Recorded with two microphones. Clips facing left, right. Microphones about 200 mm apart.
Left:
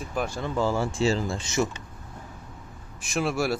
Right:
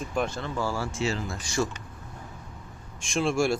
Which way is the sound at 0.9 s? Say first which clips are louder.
Left 5 dB; 30° left (ahead or behind).